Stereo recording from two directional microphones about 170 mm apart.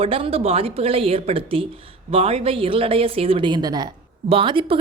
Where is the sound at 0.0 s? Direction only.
35° right (ahead or behind).